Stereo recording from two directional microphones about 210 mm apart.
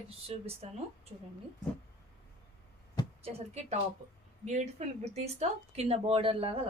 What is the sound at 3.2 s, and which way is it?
A woman's voice, 30° right (ahead or behind).